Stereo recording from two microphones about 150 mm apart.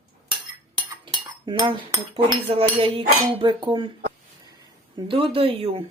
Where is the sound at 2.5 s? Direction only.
35° right (ahead or behind).